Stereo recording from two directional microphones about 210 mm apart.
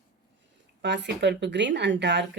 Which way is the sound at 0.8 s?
55° right (ahead or behind).